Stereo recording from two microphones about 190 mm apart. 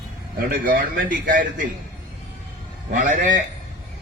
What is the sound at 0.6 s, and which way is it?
Speech, 45° right (ahead or behind).